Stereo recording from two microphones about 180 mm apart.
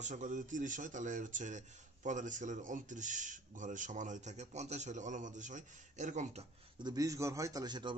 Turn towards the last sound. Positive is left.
turn(degrees=-25)  # may be behind; listen again after turning